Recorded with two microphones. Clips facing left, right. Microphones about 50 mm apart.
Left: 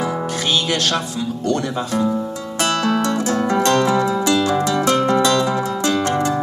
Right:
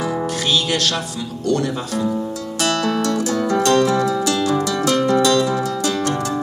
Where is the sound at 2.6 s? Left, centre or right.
Left.